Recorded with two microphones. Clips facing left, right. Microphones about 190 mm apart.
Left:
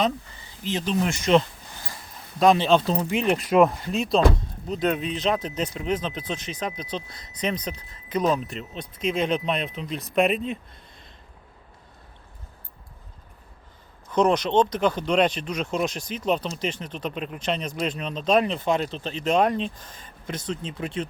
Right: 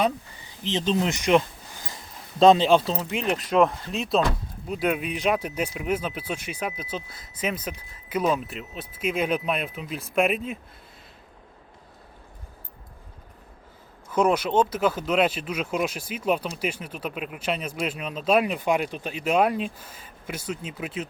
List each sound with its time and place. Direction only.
0.6 s speech: 20° right (ahead or behind)
0.9 s a sound: 20° right (ahead or behind)
2.4 s speech: 25° right (ahead or behind)
2.6 s speech: 10° right (ahead or behind)
14.1 s speech: 5° right (ahead or behind)